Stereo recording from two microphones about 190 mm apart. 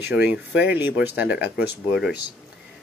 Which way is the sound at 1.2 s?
60° left (ahead or behind).